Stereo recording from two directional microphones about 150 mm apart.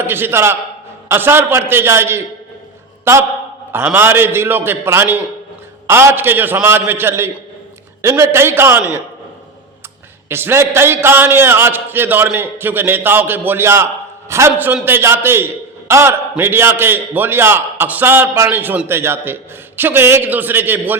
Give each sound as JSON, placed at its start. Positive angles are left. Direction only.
{"t": 0.0, "sound": "a man's voice", "side_deg": -15}
{"t": 10.2, "sound": "a man's voice", "side_deg": -15}